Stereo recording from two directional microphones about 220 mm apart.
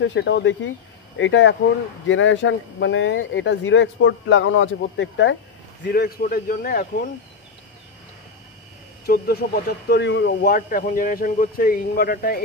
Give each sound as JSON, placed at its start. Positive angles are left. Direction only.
{"t": 0.0, "sound": "speech", "side_deg": 55}
{"t": 5.9, "sound": "speech", "side_deg": 45}
{"t": 9.0, "sound": "speech", "side_deg": 45}